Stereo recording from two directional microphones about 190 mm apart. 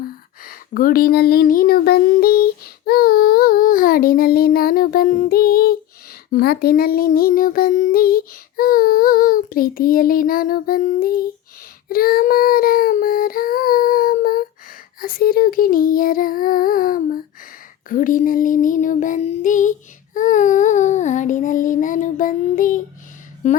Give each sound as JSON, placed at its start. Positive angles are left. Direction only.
{"t": 0.0, "sound": "speech", "side_deg": 50}
{"t": 20.1, "sound": "child singing", "side_deg": 40}